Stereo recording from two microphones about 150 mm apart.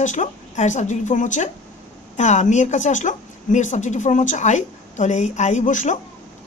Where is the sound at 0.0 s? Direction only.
55° left (ahead or behind).